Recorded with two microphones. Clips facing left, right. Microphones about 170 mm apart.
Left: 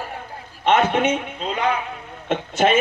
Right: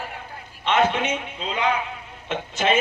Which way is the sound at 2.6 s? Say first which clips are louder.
Left 4 dB; 50° left (ahead or behind).